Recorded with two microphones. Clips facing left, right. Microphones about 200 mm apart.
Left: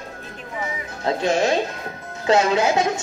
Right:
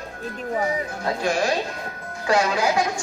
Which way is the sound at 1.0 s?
25° left (ahead or behind).